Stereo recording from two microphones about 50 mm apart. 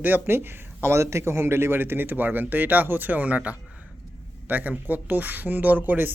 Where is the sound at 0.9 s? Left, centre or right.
Right.